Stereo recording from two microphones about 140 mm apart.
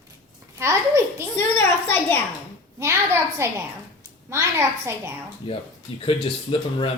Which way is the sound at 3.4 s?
20° right (ahead or behind).